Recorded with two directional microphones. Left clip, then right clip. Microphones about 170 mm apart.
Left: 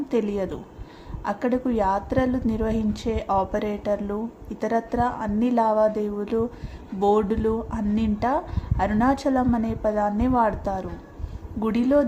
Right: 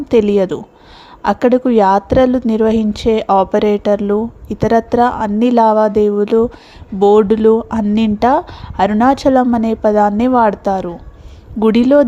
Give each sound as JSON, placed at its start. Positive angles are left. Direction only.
{"t": 0.1, "sound": "a woman's voice", "side_deg": -45}